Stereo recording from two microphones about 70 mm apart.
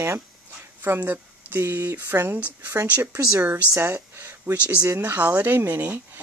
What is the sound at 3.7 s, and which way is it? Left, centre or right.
Speech, right.